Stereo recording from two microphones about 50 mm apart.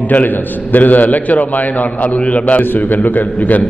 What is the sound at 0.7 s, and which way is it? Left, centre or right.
A man's voice, left.